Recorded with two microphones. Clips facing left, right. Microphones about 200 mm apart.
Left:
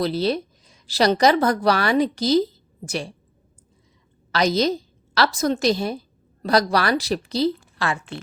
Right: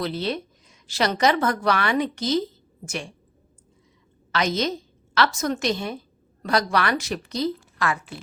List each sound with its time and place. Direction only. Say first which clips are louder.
0.0 s a woman's voice: left 5 dB; 35° left (ahead or behind)
4.3 s a woman's voice: left 4 dB; 35° left (ahead or behind)